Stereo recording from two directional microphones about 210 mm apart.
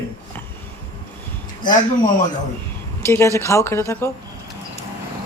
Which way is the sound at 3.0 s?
10° left (ahead or behind).